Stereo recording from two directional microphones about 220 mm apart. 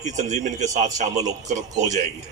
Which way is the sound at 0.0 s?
35° right (ahead or behind).